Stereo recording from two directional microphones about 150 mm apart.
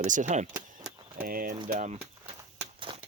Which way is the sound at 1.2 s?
75° right (ahead or behind).